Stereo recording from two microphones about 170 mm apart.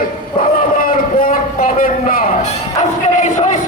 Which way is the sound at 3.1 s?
45° left (ahead or behind).